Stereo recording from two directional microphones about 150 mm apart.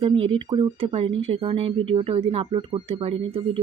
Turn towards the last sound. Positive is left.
turn(degrees=-40)  # may be behind; listen again after turning